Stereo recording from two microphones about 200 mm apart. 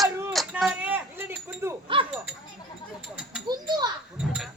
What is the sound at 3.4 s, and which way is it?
Children playing, 20° right (ahead or behind).